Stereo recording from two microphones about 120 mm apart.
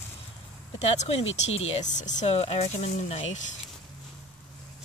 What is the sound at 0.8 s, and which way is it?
Speech, 65° left (ahead or behind).